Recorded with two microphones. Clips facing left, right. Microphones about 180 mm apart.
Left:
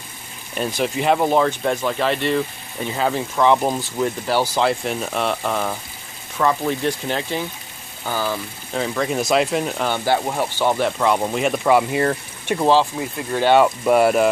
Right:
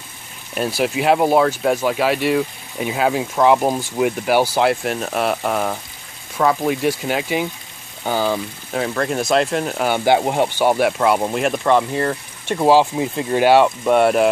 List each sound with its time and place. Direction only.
0.6 s speech: 5° right (ahead or behind)
8.0 s speech: 20° right (ahead or behind)
8.7 s speech: centre (ahead or behind)
9.8 s speech: 15° right (ahead or behind); by 12.1 s 10° left (ahead or behind)
12.5 s speech: 10° right (ahead or behind)
13.6 s speech: centre (ahead or behind)